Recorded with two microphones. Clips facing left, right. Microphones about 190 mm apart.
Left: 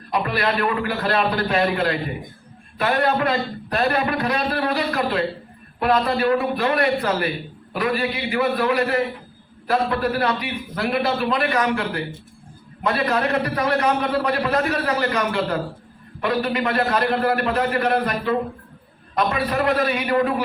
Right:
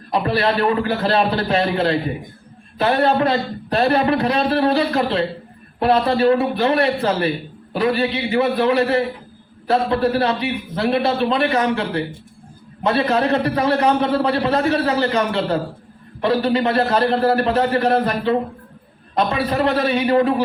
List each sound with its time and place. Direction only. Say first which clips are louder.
0.1 s a man's voice: right 4 dB; 30° right (ahead or behind)